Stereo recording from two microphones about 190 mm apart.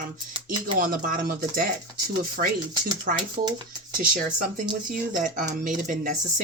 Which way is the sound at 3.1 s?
45° right (ahead or behind).